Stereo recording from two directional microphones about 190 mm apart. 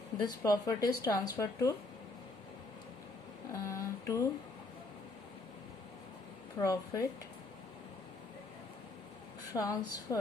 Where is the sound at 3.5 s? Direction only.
15° left (ahead or behind).